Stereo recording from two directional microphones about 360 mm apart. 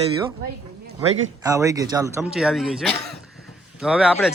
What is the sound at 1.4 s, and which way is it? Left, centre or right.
A woman's voice, centre.